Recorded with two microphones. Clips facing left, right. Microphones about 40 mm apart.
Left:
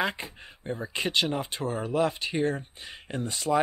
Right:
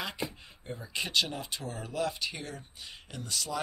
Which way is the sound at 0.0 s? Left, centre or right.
Left.